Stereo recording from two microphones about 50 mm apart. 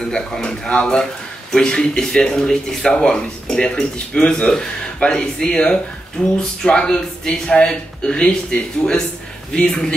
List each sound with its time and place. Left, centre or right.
0.1 s speech: centre